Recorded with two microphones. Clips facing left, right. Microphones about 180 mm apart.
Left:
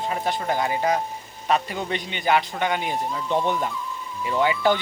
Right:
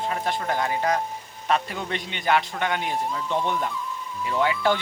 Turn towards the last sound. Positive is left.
turn(degrees=0)  # may be behind; listen again after turning